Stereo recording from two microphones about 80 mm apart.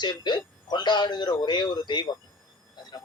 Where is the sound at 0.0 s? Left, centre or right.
Left.